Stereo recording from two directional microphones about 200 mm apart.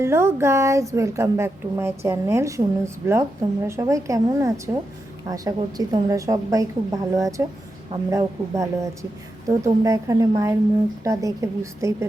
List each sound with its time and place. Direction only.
0.0 s speech: 10° right (ahead or behind)